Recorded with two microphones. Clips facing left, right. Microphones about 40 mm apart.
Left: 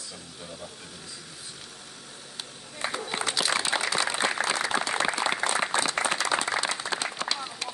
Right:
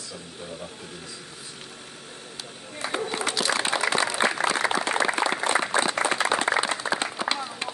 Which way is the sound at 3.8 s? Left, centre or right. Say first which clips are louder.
Right 4 dB; right.